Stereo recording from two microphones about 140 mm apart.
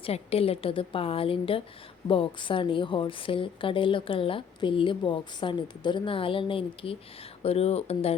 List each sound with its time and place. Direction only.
0.0 s a woman's voice: 45° left (ahead or behind)